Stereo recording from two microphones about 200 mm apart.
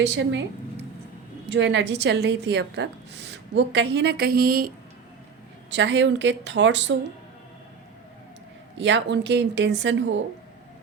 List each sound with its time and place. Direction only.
0.0 s a woman's voice: 65° right (ahead or behind)
1.5 s a woman's voice: 65° right (ahead or behind); by 4.7 s 45° right (ahead or behind)
5.7 s a woman's voice: 60° right (ahead or behind)
8.8 s a woman's voice: 65° right (ahead or behind)